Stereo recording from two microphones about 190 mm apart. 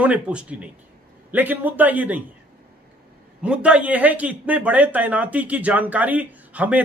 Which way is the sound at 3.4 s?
5° right (ahead or behind).